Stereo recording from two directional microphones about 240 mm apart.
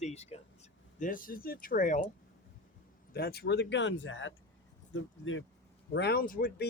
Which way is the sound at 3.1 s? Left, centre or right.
Left.